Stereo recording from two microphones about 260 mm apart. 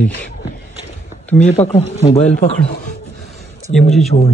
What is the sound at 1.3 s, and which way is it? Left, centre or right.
Speech, left.